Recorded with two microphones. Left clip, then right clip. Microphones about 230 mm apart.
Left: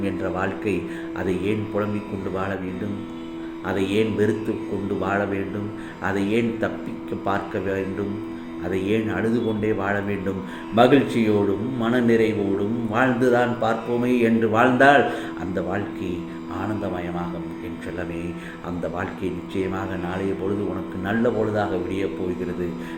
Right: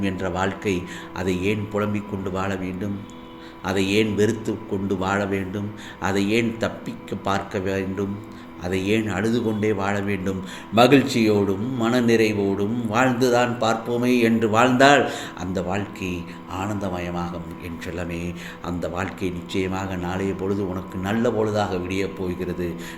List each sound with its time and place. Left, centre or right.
0.0 s a man's voice: right
3.7 s a man's voice: right
8.7 s a man's voice: right
16.6 s speech: right
18.8 s speech: right
21.0 s a man's voice: right